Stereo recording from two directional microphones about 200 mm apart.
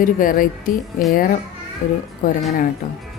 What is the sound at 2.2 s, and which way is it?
Speech, 45° left (ahead or behind).